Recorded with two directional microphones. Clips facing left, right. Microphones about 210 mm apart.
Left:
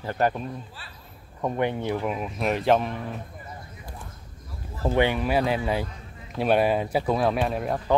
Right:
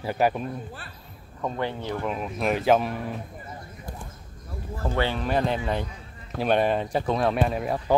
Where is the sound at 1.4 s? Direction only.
15° left (ahead or behind); by 3.2 s 5° right (ahead or behind).